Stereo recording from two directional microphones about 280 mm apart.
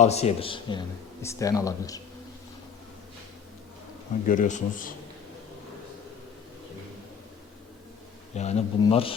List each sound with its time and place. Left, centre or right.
0.0 s speech: left
4.3 s speech: left
8.4 s speech: left